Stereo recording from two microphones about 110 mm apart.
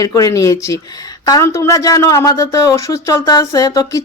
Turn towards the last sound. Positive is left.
turn(degrees=35)  # may be behind; listen again after turning